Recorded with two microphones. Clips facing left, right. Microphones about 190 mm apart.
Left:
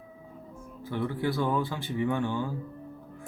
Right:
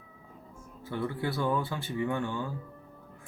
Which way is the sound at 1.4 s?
15° left (ahead or behind).